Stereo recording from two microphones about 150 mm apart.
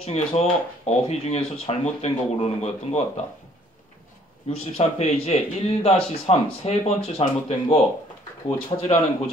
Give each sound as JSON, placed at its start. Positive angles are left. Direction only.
{"t": 0.0, "sound": "speech", "side_deg": 45}
{"t": 4.5, "sound": "speech", "side_deg": 45}